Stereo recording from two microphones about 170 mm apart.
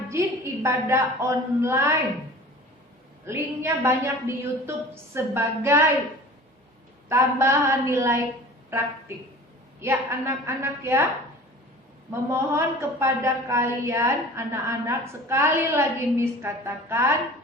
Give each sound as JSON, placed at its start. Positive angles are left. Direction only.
{"t": 0.1, "sound": "a woman's voice", "side_deg": -15}
{"t": 3.2, "sound": "a woman's voice", "side_deg": -15}
{"t": 7.1, "sound": "a woman's voice", "side_deg": -15}
{"t": 9.8, "sound": "a woman's voice", "side_deg": -15}
{"t": 12.3, "sound": "a woman's voice", "side_deg": -15}